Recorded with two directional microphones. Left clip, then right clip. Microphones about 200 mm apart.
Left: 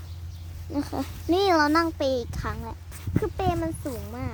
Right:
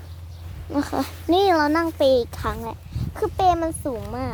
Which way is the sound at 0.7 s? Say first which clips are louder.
Right 6 dB; 5° right (ahead or behind).